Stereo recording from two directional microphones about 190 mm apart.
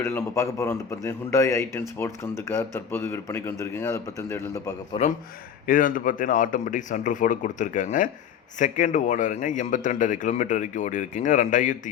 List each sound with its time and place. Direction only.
0.0 s a man's voice: 15° left (ahead or behind)
5.6 s a man's voice: 45° left (ahead or behind)